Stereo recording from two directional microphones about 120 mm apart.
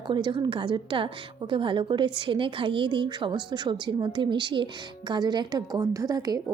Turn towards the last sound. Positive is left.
turn(degrees=-30)  # may be behind; listen again after turning